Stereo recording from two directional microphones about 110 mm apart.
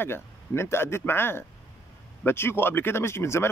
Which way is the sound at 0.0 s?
20° left (ahead or behind).